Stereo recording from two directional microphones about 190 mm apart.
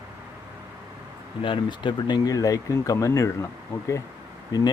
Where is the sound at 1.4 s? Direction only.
25° left (ahead or behind).